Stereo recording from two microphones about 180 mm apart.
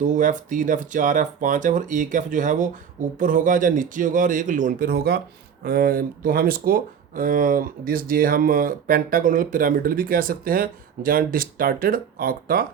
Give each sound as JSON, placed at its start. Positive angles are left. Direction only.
{"t": 0.0, "sound": "speech", "side_deg": -45}